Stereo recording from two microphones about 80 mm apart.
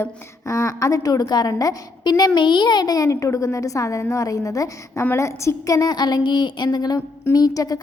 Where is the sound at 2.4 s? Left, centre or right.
Left.